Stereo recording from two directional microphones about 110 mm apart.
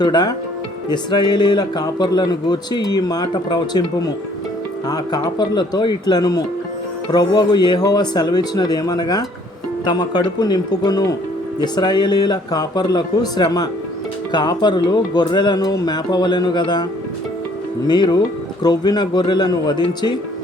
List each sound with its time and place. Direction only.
0.0 s speech: 40° left (ahead or behind)
17.8 s speech: 40° left (ahead or behind)